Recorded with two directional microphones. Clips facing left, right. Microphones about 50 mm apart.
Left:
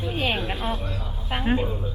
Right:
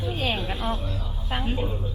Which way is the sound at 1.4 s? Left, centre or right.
Left.